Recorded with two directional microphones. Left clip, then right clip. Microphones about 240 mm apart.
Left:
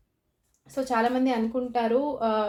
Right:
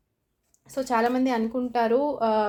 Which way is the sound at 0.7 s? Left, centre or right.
Right.